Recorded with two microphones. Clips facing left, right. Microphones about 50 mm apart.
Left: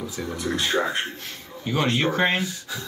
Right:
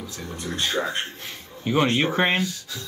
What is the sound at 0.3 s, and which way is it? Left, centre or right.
Speech, left.